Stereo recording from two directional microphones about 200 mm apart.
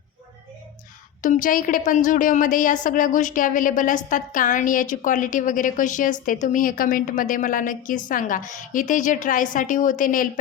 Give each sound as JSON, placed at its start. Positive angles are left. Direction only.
{"t": 1.2, "sound": "a woman's voice", "side_deg": 40}